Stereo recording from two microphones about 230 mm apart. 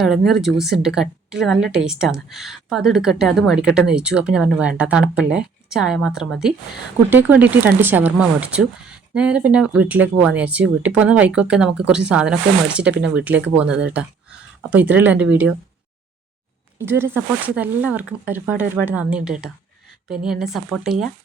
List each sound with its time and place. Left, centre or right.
0.3 s a woman's voice: centre
16.7 s a woman's voice: centre